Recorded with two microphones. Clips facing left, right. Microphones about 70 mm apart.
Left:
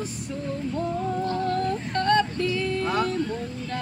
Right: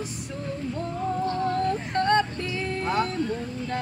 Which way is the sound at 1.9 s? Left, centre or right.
Right.